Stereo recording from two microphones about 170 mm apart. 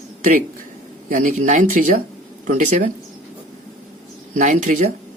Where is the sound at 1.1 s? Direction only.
50° right (ahead or behind).